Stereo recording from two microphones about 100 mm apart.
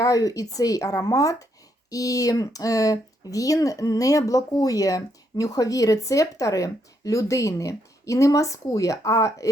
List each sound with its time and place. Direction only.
0.0 s speech: 40° left (ahead or behind)